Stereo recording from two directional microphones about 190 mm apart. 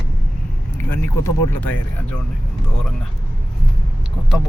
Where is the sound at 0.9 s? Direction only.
10° left (ahead or behind).